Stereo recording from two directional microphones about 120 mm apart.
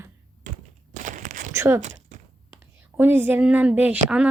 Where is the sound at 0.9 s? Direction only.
90° right.